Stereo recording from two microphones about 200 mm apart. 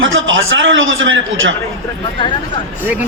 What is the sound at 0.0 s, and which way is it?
A man's voice, 75° right (ahead or behind).